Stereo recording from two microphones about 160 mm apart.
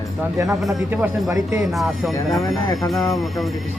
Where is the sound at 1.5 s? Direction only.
Centre (ahead or behind).